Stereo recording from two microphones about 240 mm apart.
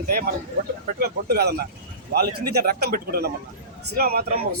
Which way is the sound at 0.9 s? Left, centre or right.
Right.